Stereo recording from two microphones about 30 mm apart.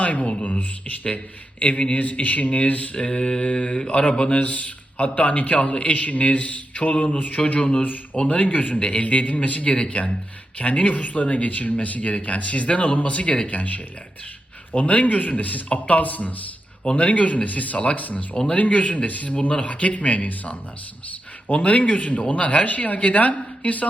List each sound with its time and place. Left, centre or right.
0.0 s speech: left
1.5 s speech: left
2.9 s mantra: left
3.4 s speech: left
4.1 s mantra: left
4.4 s speech: left
16.9 s speech: left
21.5 s speech: left